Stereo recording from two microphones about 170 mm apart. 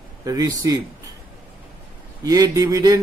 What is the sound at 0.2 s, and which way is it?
Speech, 20° right (ahead or behind).